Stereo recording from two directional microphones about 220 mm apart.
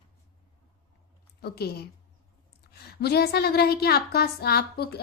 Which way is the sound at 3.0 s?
45° left (ahead or behind).